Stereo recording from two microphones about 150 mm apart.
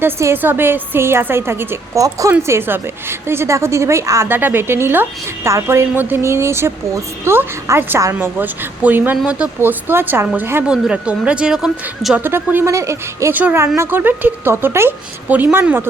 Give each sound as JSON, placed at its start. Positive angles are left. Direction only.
{"t": 0.0, "sound": "a woman's voice", "side_deg": -15}